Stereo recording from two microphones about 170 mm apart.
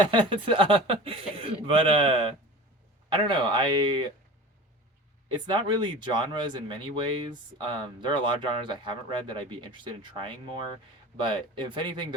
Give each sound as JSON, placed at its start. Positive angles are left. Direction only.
{"t": 0.1, "sound": "speech", "side_deg": -30}
{"t": 5.5, "sound": "speech", "side_deg": -30}